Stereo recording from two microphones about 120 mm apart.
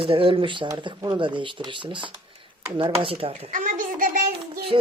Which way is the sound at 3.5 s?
90° right.